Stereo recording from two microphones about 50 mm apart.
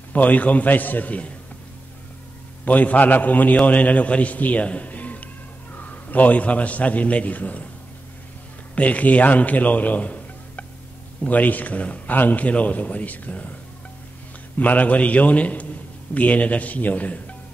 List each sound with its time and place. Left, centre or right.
0.1 s a man's voice: left
2.6 s a man's voice: left
8.7 s a man's voice: left
14.6 s a man's voice: left